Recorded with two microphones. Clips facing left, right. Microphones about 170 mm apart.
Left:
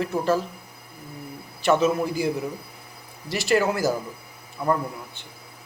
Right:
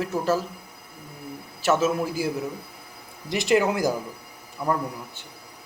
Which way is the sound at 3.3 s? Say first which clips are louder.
Right 1 dB; 20° right (ahead or behind).